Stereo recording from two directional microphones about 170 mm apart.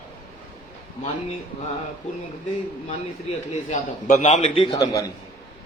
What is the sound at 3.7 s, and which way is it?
A man's voice, 45° left (ahead or behind).